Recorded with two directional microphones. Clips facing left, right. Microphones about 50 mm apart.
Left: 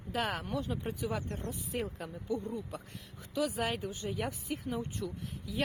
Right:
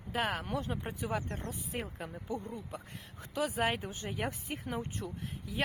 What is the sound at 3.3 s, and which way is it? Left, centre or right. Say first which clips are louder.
Speech: right 1 dB; right.